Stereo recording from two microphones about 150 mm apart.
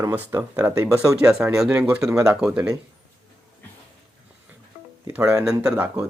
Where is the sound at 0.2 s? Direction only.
15° right (ahead or behind).